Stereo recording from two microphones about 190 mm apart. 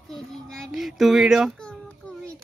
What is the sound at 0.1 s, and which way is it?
Child singing, centre (ahead or behind).